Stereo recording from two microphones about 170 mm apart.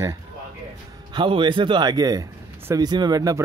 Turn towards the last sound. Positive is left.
turn(degrees=-20)  # may be behind; listen again after turning